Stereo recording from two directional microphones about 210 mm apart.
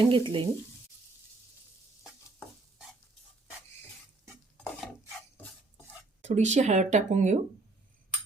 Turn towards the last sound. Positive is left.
turn(degrees=-35)  # may be behind; listen again after turning